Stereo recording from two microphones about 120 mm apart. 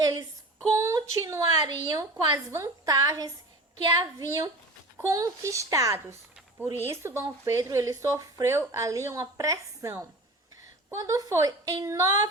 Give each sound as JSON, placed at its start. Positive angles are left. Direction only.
{"t": 0.0, "sound": "a woman's voice", "side_deg": -30}